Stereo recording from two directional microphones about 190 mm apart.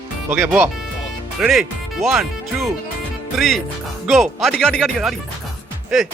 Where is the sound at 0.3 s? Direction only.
10° right (ahead or behind).